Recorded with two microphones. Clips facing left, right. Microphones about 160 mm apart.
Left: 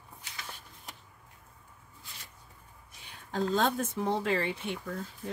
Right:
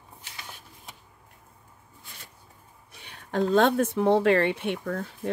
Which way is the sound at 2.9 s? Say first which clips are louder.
Right 7 dB; 65° right (ahead or behind).